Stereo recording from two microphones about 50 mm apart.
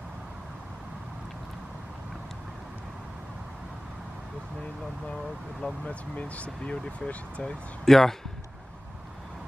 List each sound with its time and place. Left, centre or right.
5.6 s speech: left
7.8 s speech: centre